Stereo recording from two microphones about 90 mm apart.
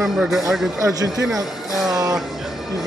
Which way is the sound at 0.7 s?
40° right (ahead or behind).